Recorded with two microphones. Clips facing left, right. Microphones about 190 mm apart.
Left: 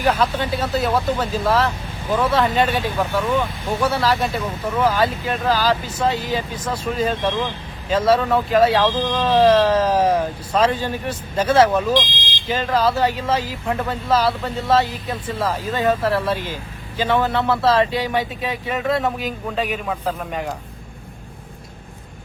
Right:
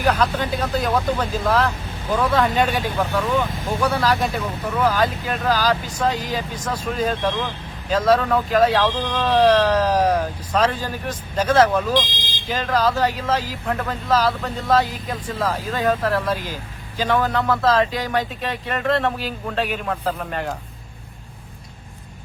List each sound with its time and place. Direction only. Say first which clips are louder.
0.0 s speech: left 1 dB; centre (ahead or behind)